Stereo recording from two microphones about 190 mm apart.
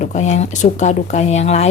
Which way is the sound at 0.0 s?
35° left (ahead or behind).